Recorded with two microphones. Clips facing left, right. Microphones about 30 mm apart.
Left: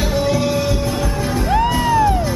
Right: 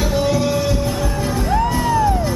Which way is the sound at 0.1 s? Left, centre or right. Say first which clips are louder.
Left 1 dB; centre.